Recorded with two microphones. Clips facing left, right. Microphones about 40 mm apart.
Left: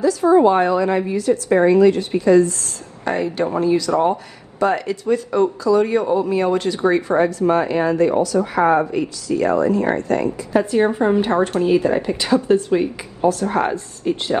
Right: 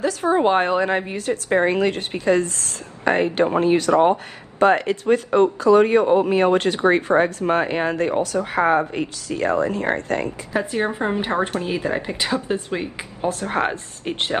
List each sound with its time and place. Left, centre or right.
0.0 s a woman's voice: right
10.6 s speech: right
11.1 s a woman's voice: right
13.3 s speech: right